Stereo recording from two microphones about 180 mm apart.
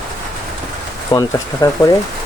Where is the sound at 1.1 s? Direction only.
20° left (ahead or behind).